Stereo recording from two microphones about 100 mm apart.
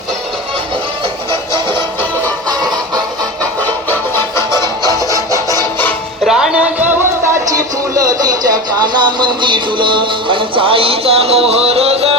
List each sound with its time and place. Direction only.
1.3 s music: 20° left (ahead or behind)
2.5 s music: 40° right (ahead or behind)
3.8 s music: 25° left (ahead or behind)
6.2 s music: 5° right (ahead or behind)
7.5 s a sound: 35° right (ahead or behind); by 12.1 s 90° right